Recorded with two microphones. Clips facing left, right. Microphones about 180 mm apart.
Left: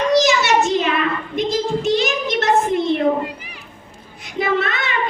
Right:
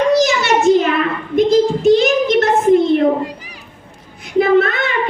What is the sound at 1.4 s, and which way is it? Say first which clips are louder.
Child singing: right 9 dB; 55° right (ahead or behind).